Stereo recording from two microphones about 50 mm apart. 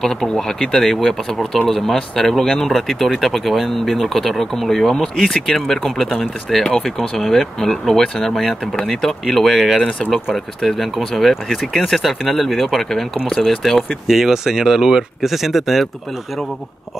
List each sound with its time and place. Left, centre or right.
0.0 s speech: centre
6.6 s speech: centre
14.0 s speech: centre